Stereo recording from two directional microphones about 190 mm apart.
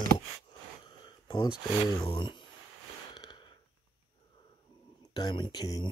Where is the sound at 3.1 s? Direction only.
25° left (ahead or behind).